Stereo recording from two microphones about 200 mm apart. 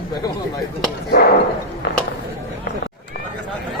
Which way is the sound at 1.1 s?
50° left (ahead or behind).